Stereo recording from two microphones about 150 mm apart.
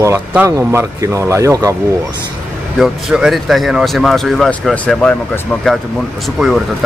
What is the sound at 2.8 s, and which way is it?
Speech, 5° right (ahead or behind).